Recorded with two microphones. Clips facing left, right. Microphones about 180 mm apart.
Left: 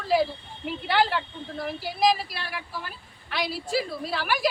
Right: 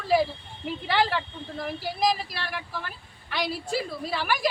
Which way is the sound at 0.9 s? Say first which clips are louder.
Left 1 dB; 5° left (ahead or behind).